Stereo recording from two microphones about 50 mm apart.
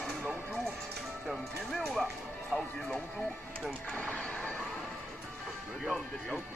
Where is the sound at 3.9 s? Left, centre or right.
Left.